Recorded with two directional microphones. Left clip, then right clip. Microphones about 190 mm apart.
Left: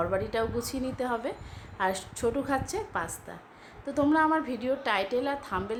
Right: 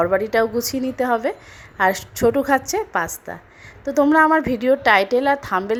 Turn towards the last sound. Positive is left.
turn(degrees=-40)  # may be behind; listen again after turning